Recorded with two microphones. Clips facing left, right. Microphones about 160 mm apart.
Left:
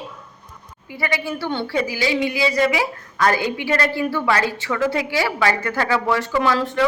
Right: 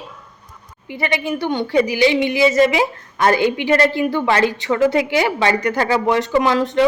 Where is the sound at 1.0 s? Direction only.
20° right (ahead or behind).